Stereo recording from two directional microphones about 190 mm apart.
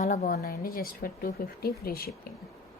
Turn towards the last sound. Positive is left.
turn(degrees=50)  # may be behind; listen again after turning